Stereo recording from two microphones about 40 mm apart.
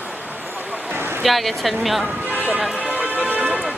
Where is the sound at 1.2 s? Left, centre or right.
Centre.